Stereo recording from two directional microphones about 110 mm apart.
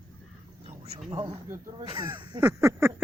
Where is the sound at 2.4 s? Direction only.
25° right (ahead or behind).